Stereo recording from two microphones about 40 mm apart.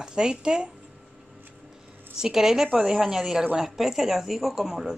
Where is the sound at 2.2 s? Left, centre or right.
Centre.